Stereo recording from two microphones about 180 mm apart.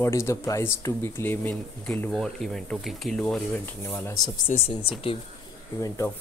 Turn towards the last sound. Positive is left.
turn(degrees=15)  # may be behind; listen again after turning